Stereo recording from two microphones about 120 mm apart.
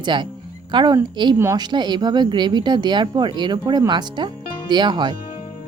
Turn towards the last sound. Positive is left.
turn(degrees=-40)  # may be behind; listen again after turning